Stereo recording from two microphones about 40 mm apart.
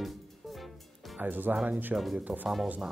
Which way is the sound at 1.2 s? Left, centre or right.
Right.